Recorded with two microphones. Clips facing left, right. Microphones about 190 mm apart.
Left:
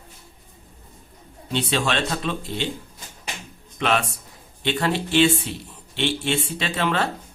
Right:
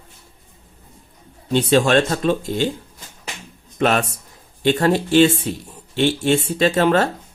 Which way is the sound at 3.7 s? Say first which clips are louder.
Right 5 dB; 45° right (ahead or behind).